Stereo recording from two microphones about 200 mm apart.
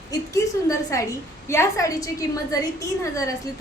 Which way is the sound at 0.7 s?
15° left (ahead or behind).